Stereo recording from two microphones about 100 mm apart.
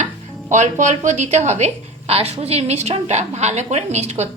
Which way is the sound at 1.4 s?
90° right.